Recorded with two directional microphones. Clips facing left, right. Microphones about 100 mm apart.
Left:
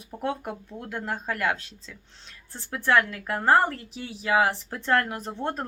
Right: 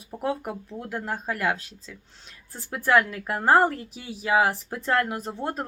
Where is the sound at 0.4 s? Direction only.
5° right (ahead or behind).